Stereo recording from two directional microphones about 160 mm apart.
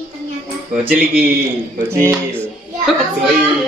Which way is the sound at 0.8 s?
10° right (ahead or behind).